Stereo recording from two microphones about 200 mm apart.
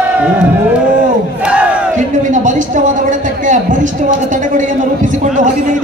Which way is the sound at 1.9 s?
40° right (ahead or behind).